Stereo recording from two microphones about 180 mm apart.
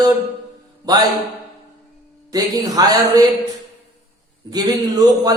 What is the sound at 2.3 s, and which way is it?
Speech, 20° right (ahead or behind).